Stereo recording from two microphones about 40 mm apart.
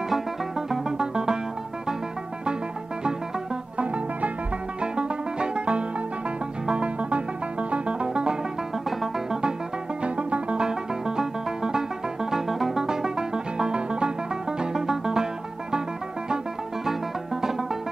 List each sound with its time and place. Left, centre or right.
0.1 s music: centre
4.9 s music: right
10.0 s music: right
10.7 s music: centre
12.8 s music: centre